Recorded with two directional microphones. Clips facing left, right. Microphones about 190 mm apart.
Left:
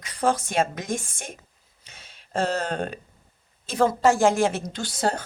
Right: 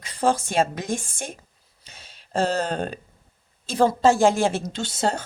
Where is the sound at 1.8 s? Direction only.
35° right (ahead or behind).